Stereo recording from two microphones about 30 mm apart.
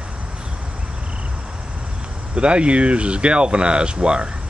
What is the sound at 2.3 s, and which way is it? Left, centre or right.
Speech, right.